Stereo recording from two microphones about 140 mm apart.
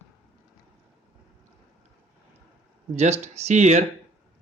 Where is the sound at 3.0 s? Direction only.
50° right (ahead or behind).